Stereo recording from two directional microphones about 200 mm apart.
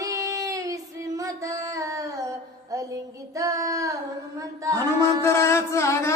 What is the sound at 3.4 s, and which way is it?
Child singing, 15° right (ahead or behind).